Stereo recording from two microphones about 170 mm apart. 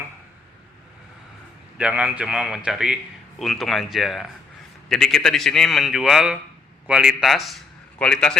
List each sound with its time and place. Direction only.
1.8 s a man's voice: 5° right (ahead or behind)